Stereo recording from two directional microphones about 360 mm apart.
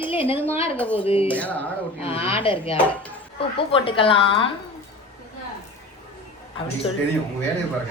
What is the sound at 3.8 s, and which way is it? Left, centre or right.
Speech, centre.